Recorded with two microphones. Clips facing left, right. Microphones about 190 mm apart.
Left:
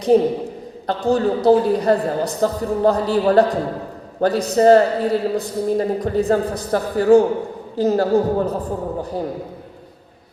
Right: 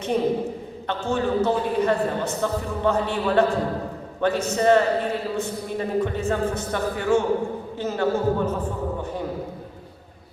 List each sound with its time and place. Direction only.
0.1 s a man's voice: 35° left (ahead or behind)